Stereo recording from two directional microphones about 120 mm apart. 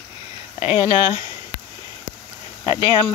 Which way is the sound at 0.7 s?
35° left (ahead or behind).